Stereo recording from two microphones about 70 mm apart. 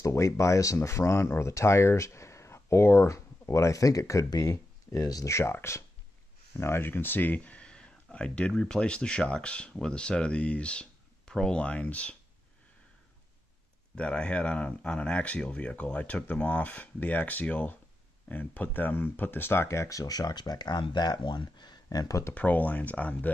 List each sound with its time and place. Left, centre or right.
0.0 s speech: left
4.4 s a sound: left
5.0 s speech: left
5.3 s speech: left; by 12.2 s centre
13.9 s speech: centre; by 21.7 s left
21.8 s speech: left
22.3 s speech: left